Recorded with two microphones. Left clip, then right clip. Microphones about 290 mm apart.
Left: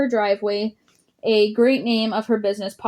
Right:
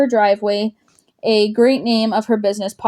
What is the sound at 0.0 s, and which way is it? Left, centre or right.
A woman's voice, right.